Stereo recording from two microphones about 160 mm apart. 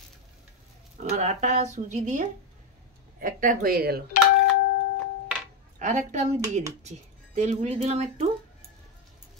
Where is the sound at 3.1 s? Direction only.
60° right (ahead or behind).